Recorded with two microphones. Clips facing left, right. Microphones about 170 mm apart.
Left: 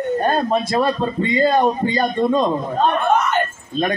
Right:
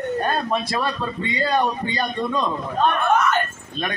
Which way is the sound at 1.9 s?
45° left (ahead or behind).